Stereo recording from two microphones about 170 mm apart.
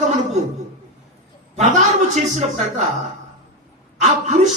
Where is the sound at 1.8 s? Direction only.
45° right (ahead or behind).